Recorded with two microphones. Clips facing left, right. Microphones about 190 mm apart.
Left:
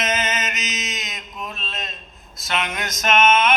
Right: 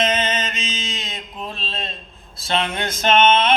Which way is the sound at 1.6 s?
30° right (ahead or behind).